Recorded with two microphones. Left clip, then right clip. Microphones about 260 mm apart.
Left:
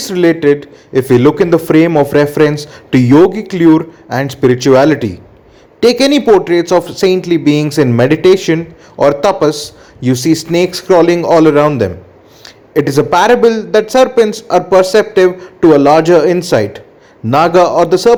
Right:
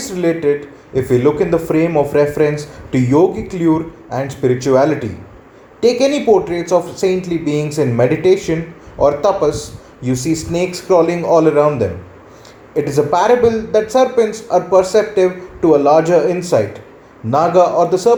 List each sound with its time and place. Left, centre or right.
0.0 s speech: left